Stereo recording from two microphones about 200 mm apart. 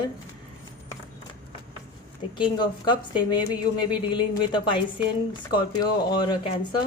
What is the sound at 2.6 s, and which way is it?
Speech, 20° left (ahead or behind).